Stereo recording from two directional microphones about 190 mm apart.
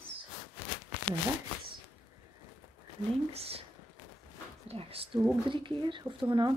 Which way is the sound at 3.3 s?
30° right (ahead or behind).